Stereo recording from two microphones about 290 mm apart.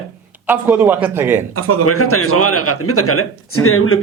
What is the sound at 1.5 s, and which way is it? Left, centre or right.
Speech, right.